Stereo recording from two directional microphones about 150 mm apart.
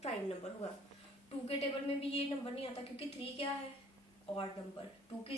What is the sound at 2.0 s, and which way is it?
A woman's voice, 40° left (ahead or behind).